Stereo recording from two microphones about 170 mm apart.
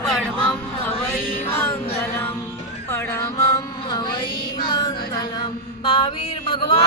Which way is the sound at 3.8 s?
30° left (ahead or behind).